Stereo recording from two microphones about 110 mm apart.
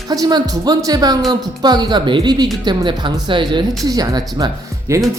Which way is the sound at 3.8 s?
35° right (ahead or behind).